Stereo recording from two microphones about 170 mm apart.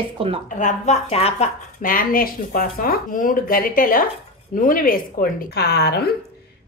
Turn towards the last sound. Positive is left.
turn(degrees=70)  # may be behind; listen again after turning